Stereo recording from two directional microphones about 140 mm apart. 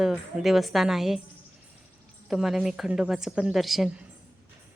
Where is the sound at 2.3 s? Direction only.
5° right (ahead or behind).